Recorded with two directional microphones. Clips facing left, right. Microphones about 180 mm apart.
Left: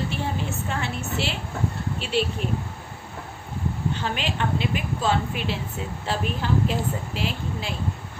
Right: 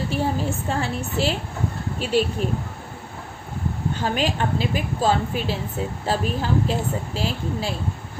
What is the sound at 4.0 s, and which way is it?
A woman's voice, 40° right (ahead or behind).